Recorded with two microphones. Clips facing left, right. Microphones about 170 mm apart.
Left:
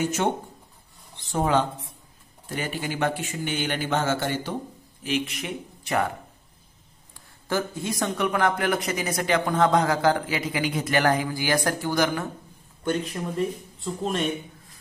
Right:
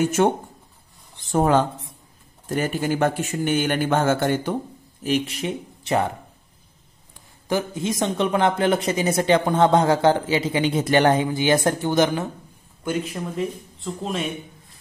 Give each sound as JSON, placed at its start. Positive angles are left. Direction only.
{"t": 0.0, "sound": "a man's voice", "side_deg": -50}
{"t": 1.3, "sound": "a man's voice", "side_deg": -45}
{"t": 5.0, "sound": "speech", "side_deg": -35}
{"t": 7.2, "sound": "a man's voice", "side_deg": -20}
{"t": 12.8, "sound": "speech", "side_deg": -5}